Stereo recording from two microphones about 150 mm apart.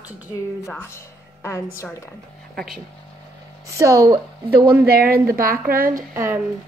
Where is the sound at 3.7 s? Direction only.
20° right (ahead or behind).